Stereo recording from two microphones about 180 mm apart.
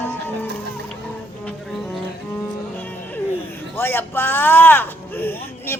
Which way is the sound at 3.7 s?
10° left (ahead or behind).